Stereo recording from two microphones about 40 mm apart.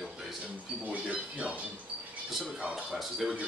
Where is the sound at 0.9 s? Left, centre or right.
Right.